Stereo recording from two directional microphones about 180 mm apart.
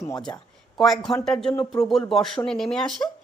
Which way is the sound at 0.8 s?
Centre (ahead or behind).